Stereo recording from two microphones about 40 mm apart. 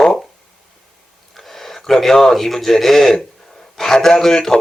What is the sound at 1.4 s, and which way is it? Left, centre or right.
Speech, centre.